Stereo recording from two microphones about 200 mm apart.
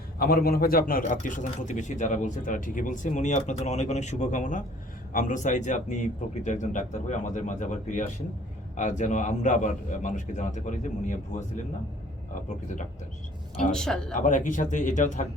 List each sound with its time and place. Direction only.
0.2 s a man's voice: 50° left (ahead or behind)
13.6 s speech: 5° left (ahead or behind)
14.2 s a man's voice: 40° left (ahead or behind)